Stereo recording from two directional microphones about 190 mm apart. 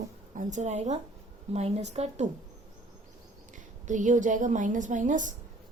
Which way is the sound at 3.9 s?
40° right (ahead or behind).